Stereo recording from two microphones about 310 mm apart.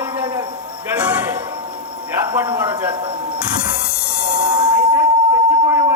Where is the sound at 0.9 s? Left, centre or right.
Centre.